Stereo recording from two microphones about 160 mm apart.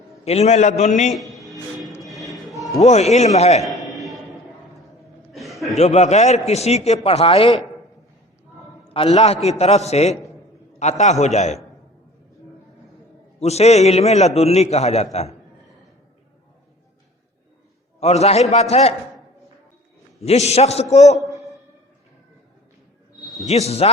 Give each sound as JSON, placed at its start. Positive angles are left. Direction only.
{"t": 0.3, "sound": "a man's voice", "side_deg": 45}
{"t": 1.1, "sound": "music", "side_deg": 0}
{"t": 2.8, "sound": "a man's voice", "side_deg": 45}
{"t": 3.6, "sound": "a sound", "side_deg": 0}
{"t": 5.3, "sound": "chuckle", "side_deg": 0}
{"t": 5.7, "sound": "a man's voice", "side_deg": 45}
{"t": 8.9, "sound": "a man's voice", "side_deg": 40}
{"t": 13.4, "sound": "a man's voice", "side_deg": 40}
{"t": 18.0, "sound": "a man's voice", "side_deg": 40}
{"t": 20.2, "sound": "a man's voice", "side_deg": 40}
{"t": 23.5, "sound": "a man's voice", "side_deg": 40}